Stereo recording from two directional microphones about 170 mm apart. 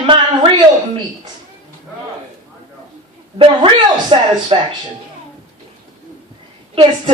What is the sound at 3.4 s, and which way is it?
A woman's voice, 30° right (ahead or behind).